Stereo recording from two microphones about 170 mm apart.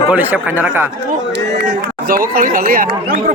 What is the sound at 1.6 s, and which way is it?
Speech, 60° right (ahead or behind).